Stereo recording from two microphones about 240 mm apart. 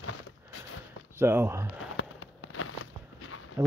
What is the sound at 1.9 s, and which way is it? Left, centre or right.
Fireworks, left.